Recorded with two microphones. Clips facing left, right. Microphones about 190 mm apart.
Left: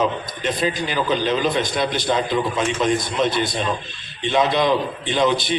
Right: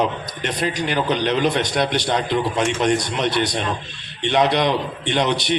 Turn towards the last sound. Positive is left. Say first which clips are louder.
# left 1 dB
turn(degrees=-70)  # may be behind; listen again after turning